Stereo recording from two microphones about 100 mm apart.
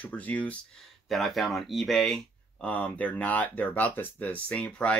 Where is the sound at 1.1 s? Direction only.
Centre (ahead or behind).